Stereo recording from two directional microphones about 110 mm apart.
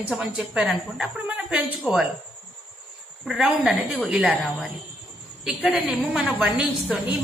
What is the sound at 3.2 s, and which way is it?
A woman's voice, 5° right (ahead or behind).